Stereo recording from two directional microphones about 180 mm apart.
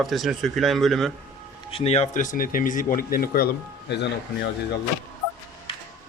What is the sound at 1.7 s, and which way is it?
Speech, 35° left (ahead or behind).